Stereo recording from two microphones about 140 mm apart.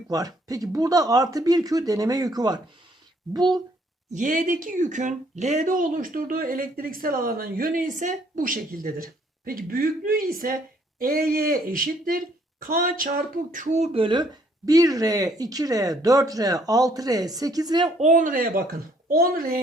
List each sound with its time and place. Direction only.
0.1 s speech: 25° right (ahead or behind)
4.1 s speech: 65° right (ahead or behind); by 17.9 s 30° right (ahead or behind)
18.0 s speech: 65° right (ahead or behind); by 19.5 s 90° right